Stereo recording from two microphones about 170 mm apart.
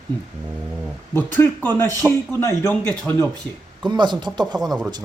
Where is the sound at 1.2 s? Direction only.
10° left (ahead or behind).